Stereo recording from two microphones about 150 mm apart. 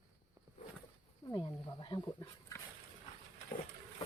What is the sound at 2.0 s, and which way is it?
Dog, 20° left (ahead or behind).